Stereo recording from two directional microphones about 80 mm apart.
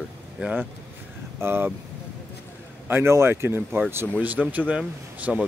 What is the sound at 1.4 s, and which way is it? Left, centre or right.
Speech, right.